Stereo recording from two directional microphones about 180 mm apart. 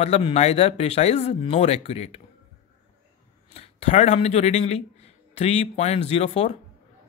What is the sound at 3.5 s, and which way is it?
A man's voice, 35° left (ahead or behind).